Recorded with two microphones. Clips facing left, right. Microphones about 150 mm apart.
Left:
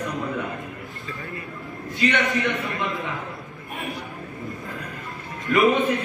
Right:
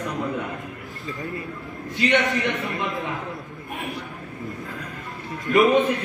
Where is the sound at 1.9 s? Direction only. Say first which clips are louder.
Right 2 dB; 20° right (ahead or behind).